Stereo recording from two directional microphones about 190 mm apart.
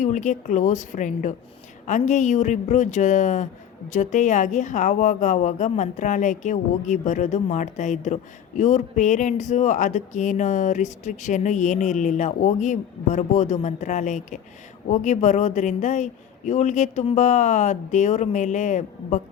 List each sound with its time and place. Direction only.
0.0 s a woman's voice: 40° left (ahead or behind)